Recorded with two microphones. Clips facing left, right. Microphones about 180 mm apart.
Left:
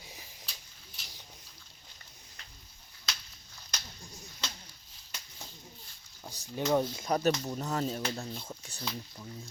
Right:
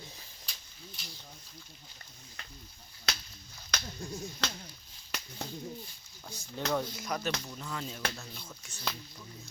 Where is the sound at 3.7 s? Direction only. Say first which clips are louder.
Right 9 dB; 70° right (ahead or behind).